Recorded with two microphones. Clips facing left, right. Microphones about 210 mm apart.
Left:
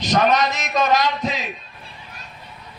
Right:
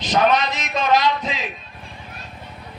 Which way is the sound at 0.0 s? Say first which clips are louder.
Even; 45° left (ahead or behind).